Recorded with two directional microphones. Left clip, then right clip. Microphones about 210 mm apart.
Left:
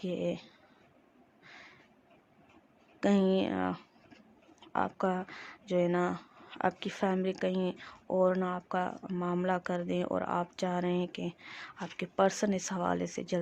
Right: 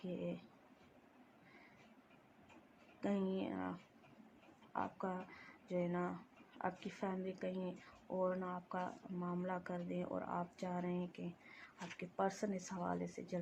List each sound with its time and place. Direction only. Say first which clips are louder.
0.0 s speech: left 11 dB; 55° left (ahead or behind)
3.0 s speech: left 13 dB; 50° left (ahead or behind)